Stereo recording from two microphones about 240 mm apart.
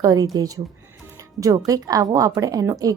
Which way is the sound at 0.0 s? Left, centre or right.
Centre.